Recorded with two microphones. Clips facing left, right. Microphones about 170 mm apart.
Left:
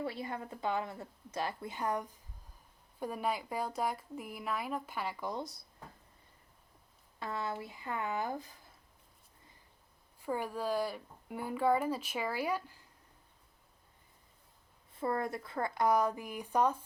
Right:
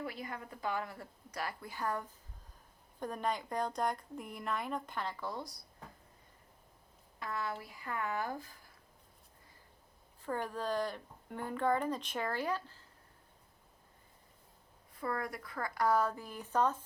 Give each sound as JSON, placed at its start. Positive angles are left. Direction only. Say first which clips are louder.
{"t": 0.0, "sound": "a woman's voice", "louder": "left 4 dB", "side_deg": 30}
{"t": 7.2, "sound": "a woman's voice", "louder": "left 2 dB", "side_deg": 25}
{"t": 10.2, "sound": "a woman's voice", "louder": "left 2 dB", "side_deg": 10}
{"t": 14.9, "sound": "a woman's voice", "louder": "left 4 dB", "side_deg": 25}